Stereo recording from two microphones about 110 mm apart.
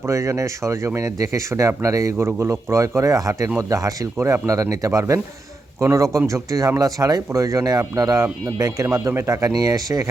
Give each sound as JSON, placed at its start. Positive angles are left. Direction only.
{"t": 0.0, "sound": "speech", "side_deg": -30}